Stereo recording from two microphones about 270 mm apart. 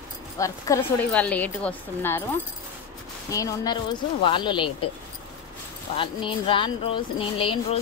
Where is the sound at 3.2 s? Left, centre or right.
Centre.